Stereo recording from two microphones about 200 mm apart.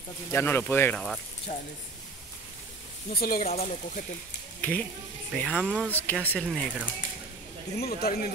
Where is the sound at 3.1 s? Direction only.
50° left (ahead or behind).